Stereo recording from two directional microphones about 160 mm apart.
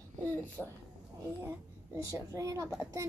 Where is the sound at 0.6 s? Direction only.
5° right (ahead or behind).